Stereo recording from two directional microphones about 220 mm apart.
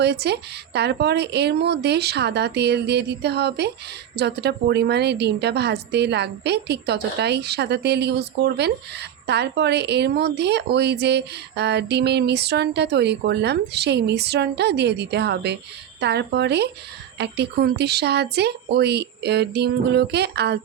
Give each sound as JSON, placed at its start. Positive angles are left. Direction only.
{"t": 0.0, "sound": "a woman's voice", "side_deg": -50}